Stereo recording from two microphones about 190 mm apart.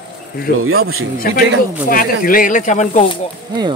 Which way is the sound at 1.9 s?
50° left (ahead or behind).